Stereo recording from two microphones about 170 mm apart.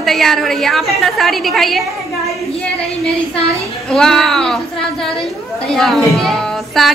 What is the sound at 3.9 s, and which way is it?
A woman's voice, 5° left (ahead or behind).